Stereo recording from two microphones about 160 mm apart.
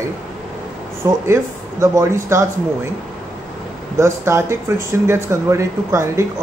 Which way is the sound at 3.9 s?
15° right (ahead or behind).